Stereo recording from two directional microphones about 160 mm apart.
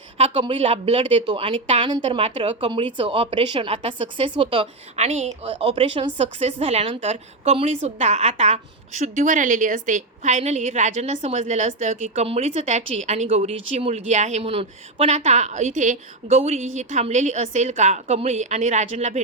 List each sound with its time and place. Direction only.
0.2 s a woman's voice: 35° right (ahead or behind)